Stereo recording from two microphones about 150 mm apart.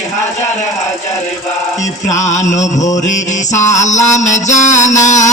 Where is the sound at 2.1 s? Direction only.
50° left (ahead or behind).